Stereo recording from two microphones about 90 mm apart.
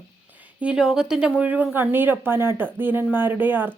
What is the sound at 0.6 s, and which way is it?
Speech, 10° right (ahead or behind).